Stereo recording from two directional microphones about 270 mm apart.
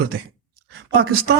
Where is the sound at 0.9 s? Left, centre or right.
Right.